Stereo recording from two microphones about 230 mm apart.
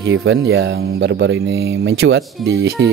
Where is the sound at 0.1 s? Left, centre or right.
Right.